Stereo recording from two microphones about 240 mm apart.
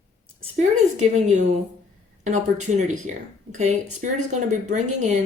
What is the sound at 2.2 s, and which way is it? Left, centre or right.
Speech, right.